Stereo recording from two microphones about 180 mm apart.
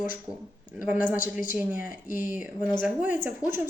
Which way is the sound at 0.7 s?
5° right (ahead or behind).